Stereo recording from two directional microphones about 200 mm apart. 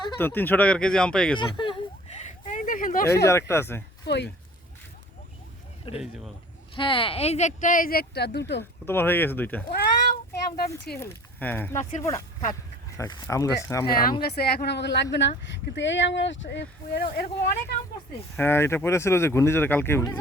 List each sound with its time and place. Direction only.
0.2 s speech: 10° left (ahead or behind)
1.4 s a sound: 25° left (ahead or behind)
2.5 s a sound: 40° left (ahead or behind)
3.2 s speech: 15° left (ahead or behind)
4.0 s speech: 60° left (ahead or behind)
5.9 s speech: 25° left (ahead or behind); by 8.6 s 60° left (ahead or behind)
8.9 s speech: 10° left (ahead or behind)
9.6 s cat: 45° left (ahead or behind)
11.0 s speech: 10° left (ahead or behind)
11.8 s speech: 35° left (ahead or behind)
13.0 s speech: 15° left (ahead or behind)
13.8 s speech: 50° left (ahead or behind)
18.3 s speech: 10° left (ahead or behind)